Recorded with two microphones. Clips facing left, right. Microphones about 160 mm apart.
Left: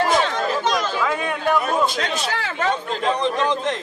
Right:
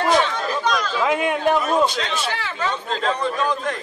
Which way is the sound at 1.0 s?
20° right (ahead or behind).